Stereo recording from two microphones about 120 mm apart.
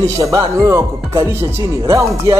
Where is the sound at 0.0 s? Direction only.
25° right (ahead or behind).